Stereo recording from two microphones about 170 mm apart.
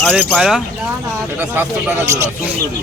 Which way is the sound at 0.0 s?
5° left (ahead or behind).